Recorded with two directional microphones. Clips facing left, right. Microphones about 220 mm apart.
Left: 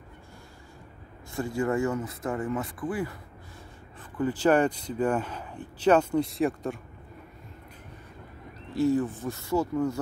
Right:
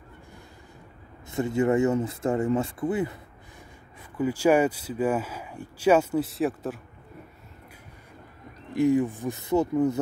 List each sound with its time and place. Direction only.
1.3 s speech: 20° right (ahead or behind)
4.2 s speech: 10° right (ahead or behind)
8.7 s speech: 15° right (ahead or behind)